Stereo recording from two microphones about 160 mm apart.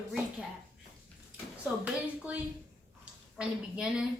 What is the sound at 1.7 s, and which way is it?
Speech, 10° right (ahead or behind).